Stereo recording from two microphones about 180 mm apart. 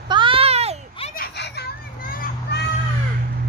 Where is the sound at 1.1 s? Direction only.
65° left (ahead or behind).